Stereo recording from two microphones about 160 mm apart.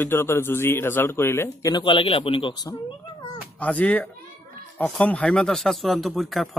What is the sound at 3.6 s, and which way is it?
A man's voice, 10° left (ahead or behind).